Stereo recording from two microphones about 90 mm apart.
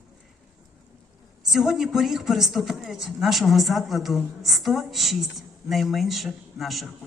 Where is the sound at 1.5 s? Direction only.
5° right (ahead or behind).